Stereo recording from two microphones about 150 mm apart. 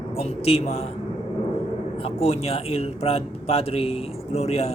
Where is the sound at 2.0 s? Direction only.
40° left (ahead or behind).